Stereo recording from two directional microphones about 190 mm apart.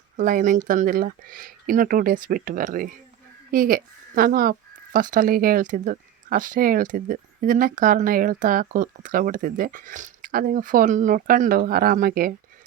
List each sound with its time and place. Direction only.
0.2 s speech: 45° right (ahead or behind)